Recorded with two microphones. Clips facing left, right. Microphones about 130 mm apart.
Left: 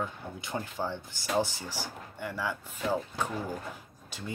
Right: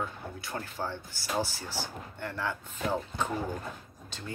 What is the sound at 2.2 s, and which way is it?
Speech, 10° left (ahead or behind).